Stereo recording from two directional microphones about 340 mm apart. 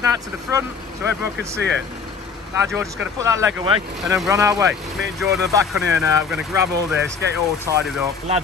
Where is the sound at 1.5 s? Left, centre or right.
Right.